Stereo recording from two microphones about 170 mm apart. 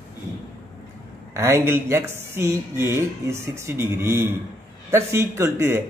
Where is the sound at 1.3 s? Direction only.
15° right (ahead or behind).